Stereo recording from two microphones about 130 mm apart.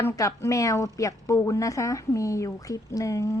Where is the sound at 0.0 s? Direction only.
25° left (ahead or behind).